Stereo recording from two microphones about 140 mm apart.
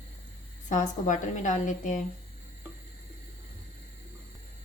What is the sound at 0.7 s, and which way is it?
A woman's voice, 65° left (ahead or behind).